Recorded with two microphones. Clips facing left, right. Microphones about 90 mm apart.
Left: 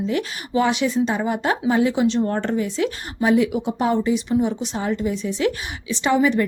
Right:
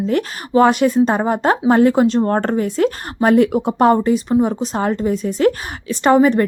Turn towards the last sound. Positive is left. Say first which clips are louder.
# right 6 dB
turn(degrees=-45)  # may be behind; listen again after turning